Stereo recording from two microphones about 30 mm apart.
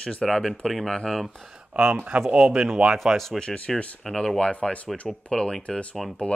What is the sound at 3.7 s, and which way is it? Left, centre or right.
Speech, centre.